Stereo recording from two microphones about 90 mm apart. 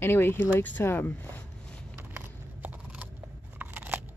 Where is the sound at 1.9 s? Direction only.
25° right (ahead or behind).